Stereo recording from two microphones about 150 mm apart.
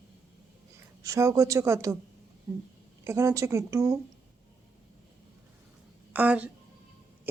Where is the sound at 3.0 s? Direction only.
20° right (ahead or behind).